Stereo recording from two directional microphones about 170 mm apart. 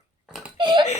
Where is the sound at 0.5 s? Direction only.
25° right (ahead or behind).